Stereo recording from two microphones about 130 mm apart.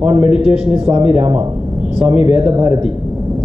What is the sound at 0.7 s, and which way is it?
Speech, 10° right (ahead or behind).